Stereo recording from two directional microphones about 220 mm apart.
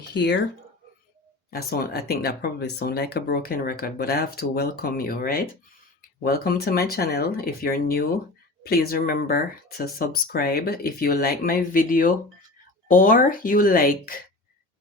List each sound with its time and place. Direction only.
0.1 s speech: 50° left (ahead or behind)
1.5 s speech: 45° left (ahead or behind)